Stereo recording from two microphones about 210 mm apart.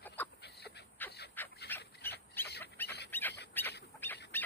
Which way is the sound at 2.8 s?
10° left (ahead or behind).